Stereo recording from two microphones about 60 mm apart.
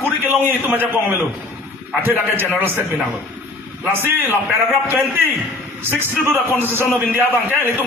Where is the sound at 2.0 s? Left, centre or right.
Right.